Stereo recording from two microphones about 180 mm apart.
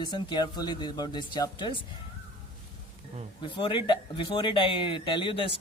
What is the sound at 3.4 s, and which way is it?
Speech, 25° left (ahead or behind).